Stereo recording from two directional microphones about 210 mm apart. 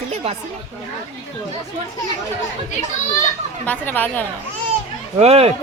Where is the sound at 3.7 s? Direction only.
10° left (ahead or behind).